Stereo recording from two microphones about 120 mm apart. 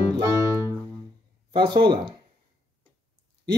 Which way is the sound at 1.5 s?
40° right (ahead or behind).